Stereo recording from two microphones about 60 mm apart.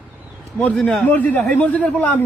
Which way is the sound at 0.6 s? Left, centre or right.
Centre.